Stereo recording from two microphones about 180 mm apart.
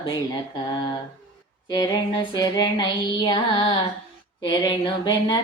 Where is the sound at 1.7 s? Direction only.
25° left (ahead or behind).